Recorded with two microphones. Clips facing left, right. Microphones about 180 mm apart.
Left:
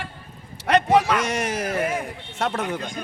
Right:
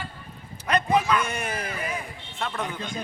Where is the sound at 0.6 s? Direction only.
80° left.